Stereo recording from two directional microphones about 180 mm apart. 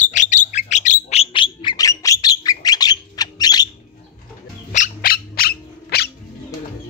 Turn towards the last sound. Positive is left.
turn(degrees=60)  # may be behind; listen again after turning